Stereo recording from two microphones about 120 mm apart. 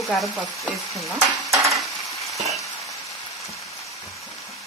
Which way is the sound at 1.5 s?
25° right (ahead or behind).